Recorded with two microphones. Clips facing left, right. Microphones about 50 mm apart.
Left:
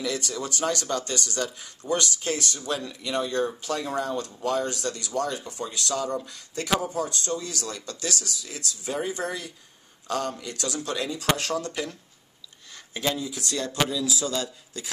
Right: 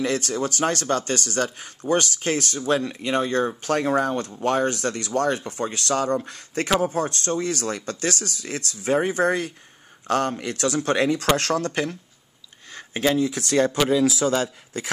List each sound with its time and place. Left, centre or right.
0.0 s speech: right
12.7 s a sound: right
13.2 s speech: right